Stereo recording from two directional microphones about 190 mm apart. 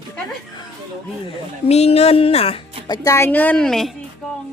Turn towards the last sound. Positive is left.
turn(degrees=5)  # may be behind; listen again after turning